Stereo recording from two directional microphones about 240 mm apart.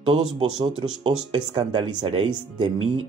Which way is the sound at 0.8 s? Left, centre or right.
Centre.